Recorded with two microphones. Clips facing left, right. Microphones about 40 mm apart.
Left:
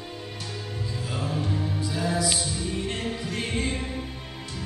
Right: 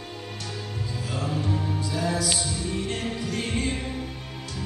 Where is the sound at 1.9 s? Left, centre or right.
Centre.